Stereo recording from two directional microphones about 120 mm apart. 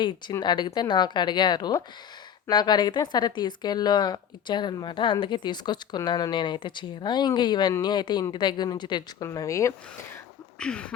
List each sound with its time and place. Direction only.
0.0 s speech: 40° left (ahead or behind)
9.2 s speech: 25° left (ahead or behind)
10.6 s a sound: 10° left (ahead or behind)